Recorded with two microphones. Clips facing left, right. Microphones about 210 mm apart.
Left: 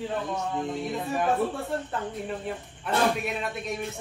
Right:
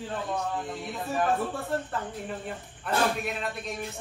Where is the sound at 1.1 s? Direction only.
Centre (ahead or behind).